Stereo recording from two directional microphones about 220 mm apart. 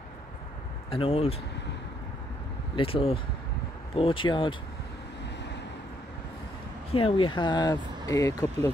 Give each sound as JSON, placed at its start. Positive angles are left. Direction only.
{"t": 0.8, "sound": "speech", "side_deg": 25}
{"t": 2.7, "sound": "speech", "side_deg": 25}
{"t": 6.9, "sound": "speech", "side_deg": 25}